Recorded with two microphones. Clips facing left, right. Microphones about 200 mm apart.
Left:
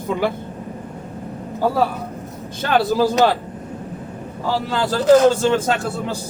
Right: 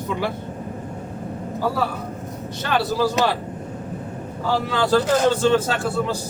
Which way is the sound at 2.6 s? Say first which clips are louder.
Left 4 dB; 50° left (ahead or behind).